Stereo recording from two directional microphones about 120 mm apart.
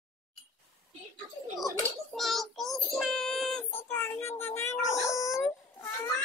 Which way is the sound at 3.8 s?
15° left (ahead or behind).